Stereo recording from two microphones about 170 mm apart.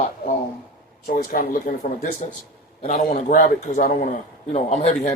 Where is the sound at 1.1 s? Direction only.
55° left (ahead or behind).